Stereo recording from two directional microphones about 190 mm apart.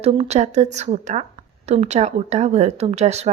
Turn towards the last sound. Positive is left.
turn(degrees=-35)  # may be behind; listen again after turning